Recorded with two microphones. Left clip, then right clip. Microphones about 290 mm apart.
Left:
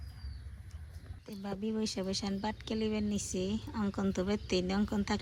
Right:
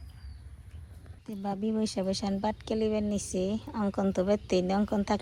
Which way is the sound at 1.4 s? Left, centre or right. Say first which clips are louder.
Right 5 dB; centre.